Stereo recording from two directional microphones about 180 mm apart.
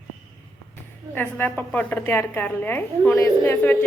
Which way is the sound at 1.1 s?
10° left (ahead or behind).